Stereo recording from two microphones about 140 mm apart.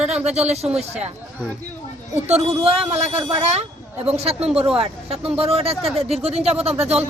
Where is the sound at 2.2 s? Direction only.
50° right (ahead or behind).